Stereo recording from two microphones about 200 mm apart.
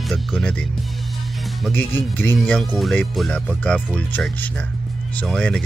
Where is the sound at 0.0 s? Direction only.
Centre (ahead or behind).